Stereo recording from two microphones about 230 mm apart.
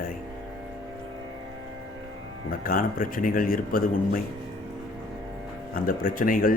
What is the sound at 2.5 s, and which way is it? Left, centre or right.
Speech, left.